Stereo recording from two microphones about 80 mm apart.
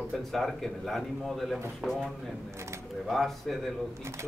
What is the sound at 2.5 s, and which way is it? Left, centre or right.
Speech, right.